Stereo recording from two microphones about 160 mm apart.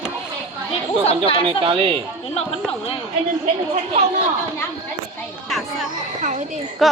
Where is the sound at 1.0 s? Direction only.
35° left (ahead or behind).